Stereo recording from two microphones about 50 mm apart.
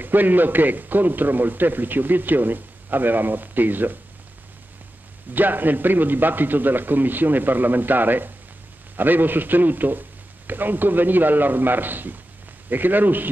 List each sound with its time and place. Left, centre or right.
0.0 s a man's voice: right
5.3 s a man's voice: right